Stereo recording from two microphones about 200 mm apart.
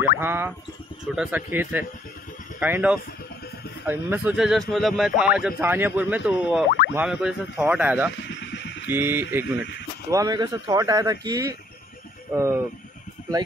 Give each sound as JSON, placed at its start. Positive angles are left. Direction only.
{"t": 0.2, "sound": "a man's voice", "side_deg": -10}
{"t": 8.2, "sound": "a sound", "side_deg": 60}
{"t": 8.8, "sound": "a man's voice", "side_deg": -10}